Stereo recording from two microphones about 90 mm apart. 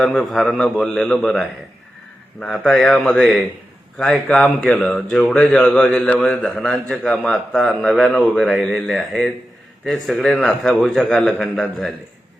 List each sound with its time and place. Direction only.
0.0 s a man's voice: centre (ahead or behind)
4.1 s a man's voice: 15° left (ahead or behind)
6.4 s a man's voice: 5° left (ahead or behind)
11.0 s a man's voice: 10° left (ahead or behind)